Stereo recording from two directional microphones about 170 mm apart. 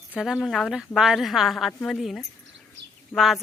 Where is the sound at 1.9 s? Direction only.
Centre (ahead or behind).